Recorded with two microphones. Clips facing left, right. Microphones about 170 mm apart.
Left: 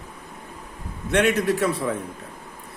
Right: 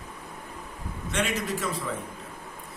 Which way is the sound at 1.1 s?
65° left (ahead or behind).